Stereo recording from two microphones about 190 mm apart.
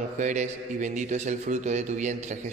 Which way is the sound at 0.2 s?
40° right (ahead or behind).